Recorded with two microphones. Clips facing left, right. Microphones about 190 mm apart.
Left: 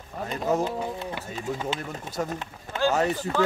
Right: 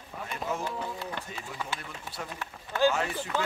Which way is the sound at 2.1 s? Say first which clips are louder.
Left 10 dB; 45° left (ahead or behind).